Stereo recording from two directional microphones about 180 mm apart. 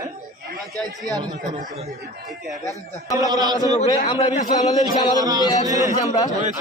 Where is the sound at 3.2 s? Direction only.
20° right (ahead or behind).